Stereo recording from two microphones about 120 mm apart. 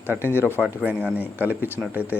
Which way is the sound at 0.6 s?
10° right (ahead or behind).